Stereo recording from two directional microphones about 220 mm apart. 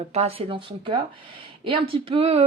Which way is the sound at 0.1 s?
25° right (ahead or behind).